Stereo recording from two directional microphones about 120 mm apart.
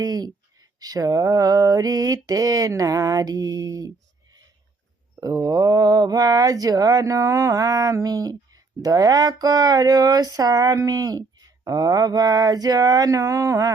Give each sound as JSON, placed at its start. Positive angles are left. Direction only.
{"t": 0.0, "sound": "speech", "side_deg": -35}
{"t": 5.2, "sound": "speech", "side_deg": -30}